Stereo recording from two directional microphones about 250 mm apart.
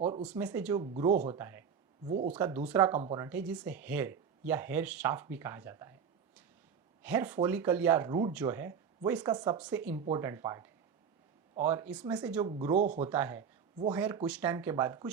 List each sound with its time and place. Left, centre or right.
0.2 s speech: centre
1.1 s speech: right
1.4 s speech: centre
3.2 s speech: centre
7.0 s speech: centre